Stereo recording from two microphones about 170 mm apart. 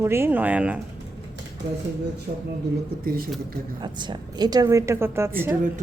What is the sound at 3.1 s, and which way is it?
Speech, 60° right (ahead or behind).